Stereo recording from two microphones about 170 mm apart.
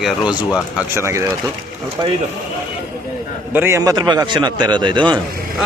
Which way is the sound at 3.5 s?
15° right (ahead or behind).